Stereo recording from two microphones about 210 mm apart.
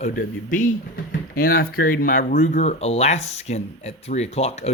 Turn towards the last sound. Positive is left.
turn(degrees=30)  # may be behind; listen again after turning